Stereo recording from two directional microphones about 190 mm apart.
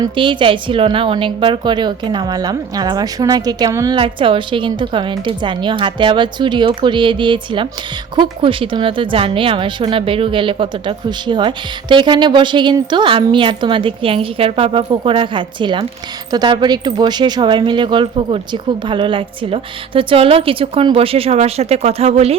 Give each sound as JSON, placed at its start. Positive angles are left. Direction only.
{"t": 0.0, "sound": "a woman's voice", "side_deg": -25}